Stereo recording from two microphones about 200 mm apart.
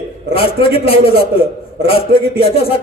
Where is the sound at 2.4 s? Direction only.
30° left (ahead or behind).